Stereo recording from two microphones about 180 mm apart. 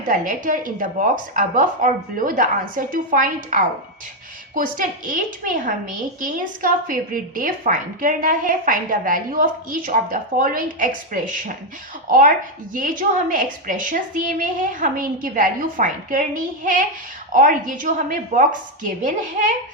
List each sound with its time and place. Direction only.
0.0 s a woman's voice: 45° right (ahead or behind)